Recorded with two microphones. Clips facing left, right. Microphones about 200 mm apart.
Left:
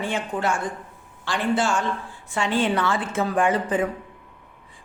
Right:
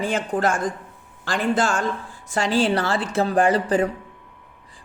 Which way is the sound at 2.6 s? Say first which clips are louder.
Right 1 dB; 35° right (ahead or behind).